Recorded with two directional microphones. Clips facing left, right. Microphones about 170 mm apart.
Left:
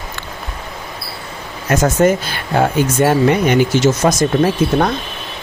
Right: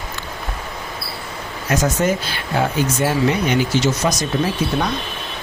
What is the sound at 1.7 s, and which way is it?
Speech, 50° left (ahead or behind).